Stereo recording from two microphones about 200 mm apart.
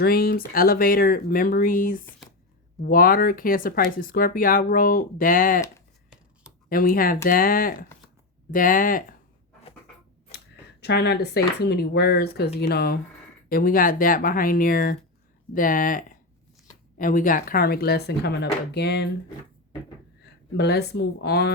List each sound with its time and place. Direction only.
0.0 s speech: 50° left (ahead or behind)
6.7 s speech: 45° left (ahead or behind)
10.3 s speech: 55° left (ahead or behind)
20.2 s a woman's voice: 55° left (ahead or behind)